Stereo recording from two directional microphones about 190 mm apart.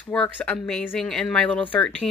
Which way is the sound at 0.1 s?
5° left (ahead or behind).